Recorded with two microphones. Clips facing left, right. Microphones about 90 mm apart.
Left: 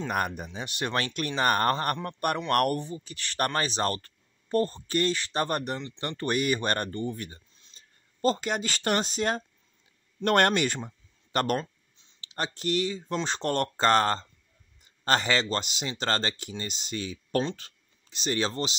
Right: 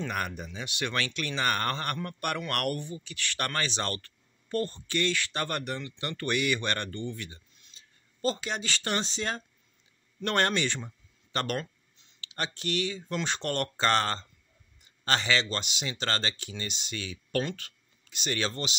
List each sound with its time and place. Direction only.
0.1 s a man's voice: 45° left (ahead or behind)
17.4 s a man's voice: 25° left (ahead or behind)